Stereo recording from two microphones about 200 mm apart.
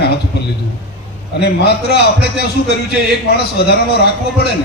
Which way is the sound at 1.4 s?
55° left (ahead or behind).